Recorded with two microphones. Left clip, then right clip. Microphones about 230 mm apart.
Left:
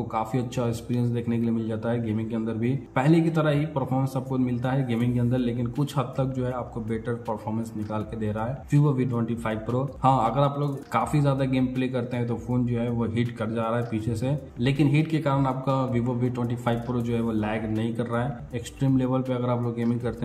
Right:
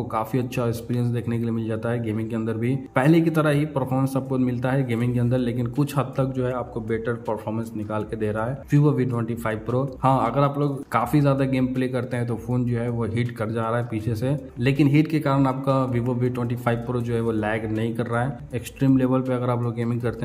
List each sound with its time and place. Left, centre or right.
0.1 s a man's voice: centre